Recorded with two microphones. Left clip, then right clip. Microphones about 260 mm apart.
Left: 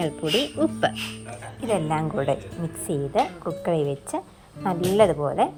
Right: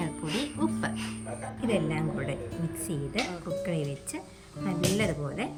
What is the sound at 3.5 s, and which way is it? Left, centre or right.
Speech, left.